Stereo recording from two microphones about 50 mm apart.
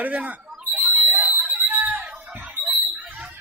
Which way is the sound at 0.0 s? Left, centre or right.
Right.